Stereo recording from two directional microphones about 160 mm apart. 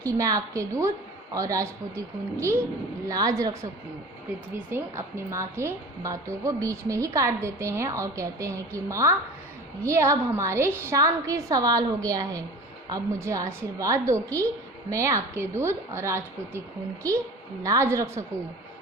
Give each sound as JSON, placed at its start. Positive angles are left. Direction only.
{"t": 0.0, "sound": "a woman's voice", "side_deg": -20}